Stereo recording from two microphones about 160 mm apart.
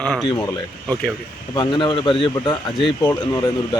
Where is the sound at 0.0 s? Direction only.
Centre (ahead or behind).